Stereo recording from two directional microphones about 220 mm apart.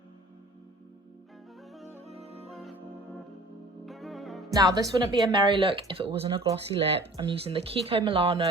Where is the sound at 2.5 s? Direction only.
Centre (ahead or behind).